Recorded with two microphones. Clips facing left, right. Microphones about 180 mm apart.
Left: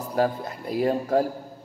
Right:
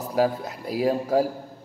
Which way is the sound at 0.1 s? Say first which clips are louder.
Right 1 dB; 5° right (ahead or behind).